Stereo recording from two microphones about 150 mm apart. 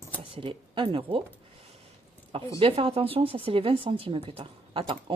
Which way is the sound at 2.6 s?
40° right (ahead or behind).